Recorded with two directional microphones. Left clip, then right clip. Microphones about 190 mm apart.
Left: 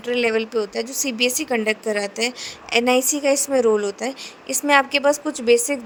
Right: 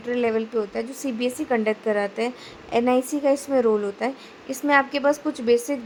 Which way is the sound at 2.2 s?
45° left (ahead or behind).